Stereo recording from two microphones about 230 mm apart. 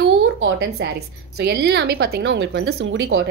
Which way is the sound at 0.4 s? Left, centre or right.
Right.